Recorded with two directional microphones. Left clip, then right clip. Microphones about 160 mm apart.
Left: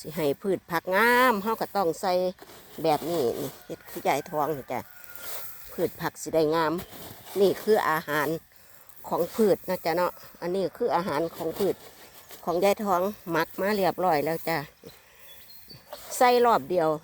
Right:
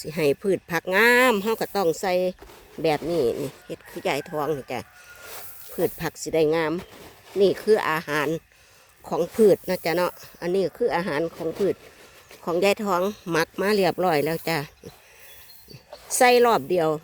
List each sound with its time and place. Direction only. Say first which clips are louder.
0.0 s speech: right 5 dB; 50° right (ahead or behind); by 8.3 s 30° right (ahead or behind)
9.0 s speech: right 5 dB; 45° right (ahead or behind)
16.1 s a woman's voice: right 3 dB; 55° right (ahead or behind)